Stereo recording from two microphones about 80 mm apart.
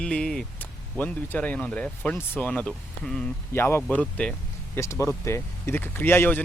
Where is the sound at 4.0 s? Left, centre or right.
Centre.